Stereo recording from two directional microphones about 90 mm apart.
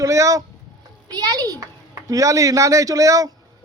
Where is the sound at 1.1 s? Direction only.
50° right (ahead or behind).